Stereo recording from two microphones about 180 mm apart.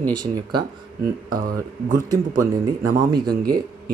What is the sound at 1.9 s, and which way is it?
Speech, 20° right (ahead or behind).